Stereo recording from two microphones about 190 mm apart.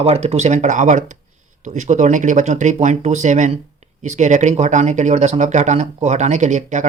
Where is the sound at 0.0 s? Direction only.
30° right (ahead or behind).